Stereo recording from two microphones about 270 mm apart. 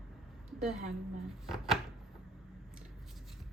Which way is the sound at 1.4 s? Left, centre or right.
Centre.